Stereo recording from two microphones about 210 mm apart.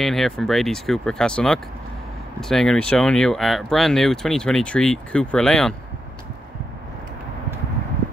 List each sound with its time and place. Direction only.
0.0 s speech: centre (ahead or behind)